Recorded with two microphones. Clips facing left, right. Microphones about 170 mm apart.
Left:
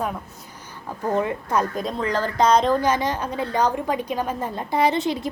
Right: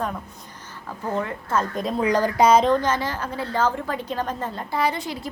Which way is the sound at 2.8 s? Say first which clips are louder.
Left 3 dB; 15° left (ahead or behind).